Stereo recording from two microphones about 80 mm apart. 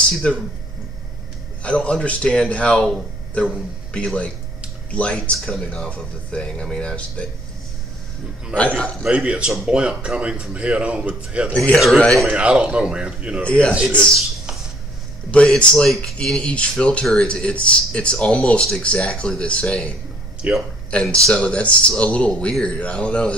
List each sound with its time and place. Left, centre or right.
0.2 s speech: centre
1.6 s speech: centre
3.9 s speech: centre
8.5 s speech: centre
9.0 s speech: centre
11.5 s speech: centre
12.1 s speech: centre
12.4 s speech: centre
13.4 s speech: centre
15.3 s speech: centre
20.4 s speech: centre
20.9 s speech: centre